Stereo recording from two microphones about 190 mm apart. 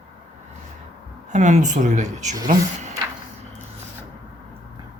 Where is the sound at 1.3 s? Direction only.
40° right (ahead or behind).